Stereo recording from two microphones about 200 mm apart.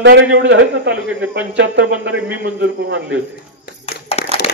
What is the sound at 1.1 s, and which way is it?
Speech, 10° right (ahead or behind).